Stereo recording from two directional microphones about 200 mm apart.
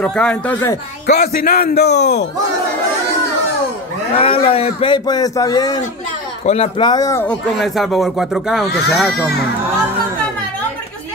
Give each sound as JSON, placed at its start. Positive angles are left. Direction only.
{"t": 0.0, "sound": "speech", "side_deg": 5}
{"t": 1.1, "sound": "a man's voice", "side_deg": 50}
{"t": 4.1, "sound": "a man's voice", "side_deg": 30}
{"t": 6.4, "sound": "a man's voice", "side_deg": 30}
{"t": 7.5, "sound": "speech", "side_deg": 0}